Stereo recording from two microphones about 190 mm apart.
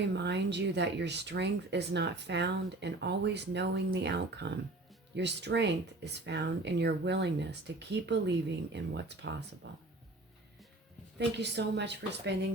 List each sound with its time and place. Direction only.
0.1 s speech: 65° right (ahead or behind)
11.3 s speech: 65° right (ahead or behind)